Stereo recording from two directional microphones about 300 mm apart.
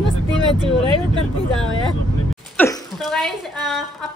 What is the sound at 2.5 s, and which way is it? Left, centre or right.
Speech, centre.